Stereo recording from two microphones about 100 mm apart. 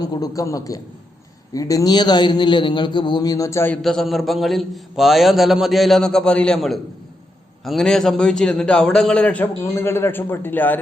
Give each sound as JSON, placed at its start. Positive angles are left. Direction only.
{"t": 0.0, "sound": "a man's voice", "side_deg": 40}
{"t": 3.8, "sound": "a man's voice", "side_deg": 0}